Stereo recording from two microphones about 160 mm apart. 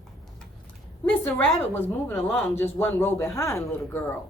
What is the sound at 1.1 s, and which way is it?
A woman's voice, 10° left (ahead or behind).